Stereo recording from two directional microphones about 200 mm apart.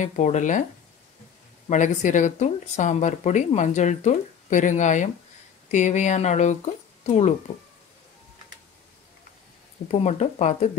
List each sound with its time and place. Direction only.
0.0 s speech: 35° left (ahead or behind)
1.7 s speech: 40° left (ahead or behind)
9.8 s speech: 35° left (ahead or behind)